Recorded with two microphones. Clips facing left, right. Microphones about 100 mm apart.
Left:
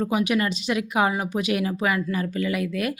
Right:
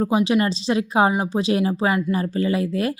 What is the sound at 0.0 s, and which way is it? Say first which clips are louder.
A woman's voice: right 4 dB; 30° right (ahead or behind).